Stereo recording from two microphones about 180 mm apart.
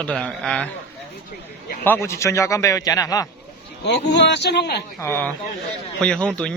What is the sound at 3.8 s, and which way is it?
Speech, 70° left (ahead or behind).